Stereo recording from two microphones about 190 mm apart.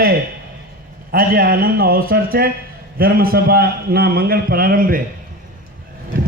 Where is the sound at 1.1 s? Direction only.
50° right (ahead or behind).